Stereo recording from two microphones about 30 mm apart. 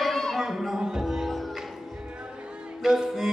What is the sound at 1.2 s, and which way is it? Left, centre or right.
Music, centre.